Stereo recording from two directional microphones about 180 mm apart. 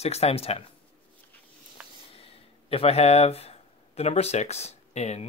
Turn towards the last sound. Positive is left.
turn(degrees=40)  # may be behind; listen again after turning